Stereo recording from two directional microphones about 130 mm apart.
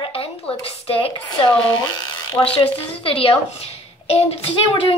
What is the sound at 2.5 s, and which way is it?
Child singing, 45° left (ahead or behind).